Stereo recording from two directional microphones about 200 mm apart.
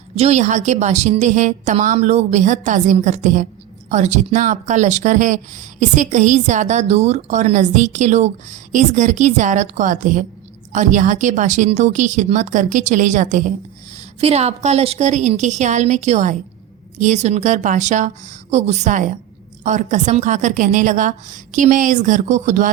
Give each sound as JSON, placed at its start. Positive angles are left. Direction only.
{"t": 0.2, "sound": "speech", "side_deg": -35}